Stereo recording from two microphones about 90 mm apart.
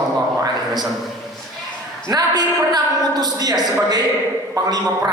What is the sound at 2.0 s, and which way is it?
A woman's voice, 45° right (ahead or behind).